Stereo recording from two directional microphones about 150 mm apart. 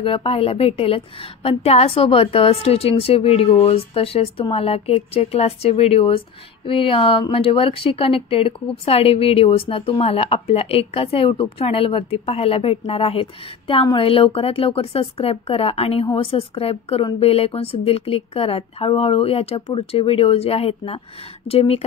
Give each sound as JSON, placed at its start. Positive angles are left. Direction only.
{"t": 0.0, "sound": "a woman's voice", "side_deg": 35}